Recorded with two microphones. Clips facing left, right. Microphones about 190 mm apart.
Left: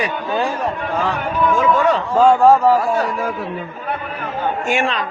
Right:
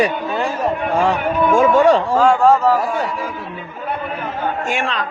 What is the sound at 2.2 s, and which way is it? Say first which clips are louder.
Speech: left 2 dB; 15° left (ahead or behind).